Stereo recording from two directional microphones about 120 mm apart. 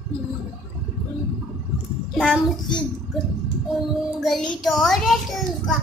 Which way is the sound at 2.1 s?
Centre (ahead or behind).